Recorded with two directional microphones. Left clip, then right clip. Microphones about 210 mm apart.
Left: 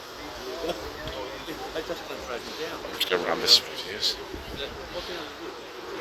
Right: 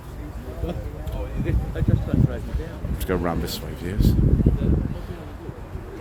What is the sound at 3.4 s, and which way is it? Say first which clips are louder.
Speech: left 11 dB; 25° right (ahead or behind).